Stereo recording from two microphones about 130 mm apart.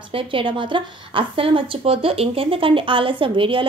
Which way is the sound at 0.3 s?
40° right (ahead or behind).